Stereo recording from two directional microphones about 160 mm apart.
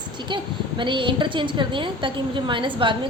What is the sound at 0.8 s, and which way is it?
A woman's voice, 30° right (ahead or behind).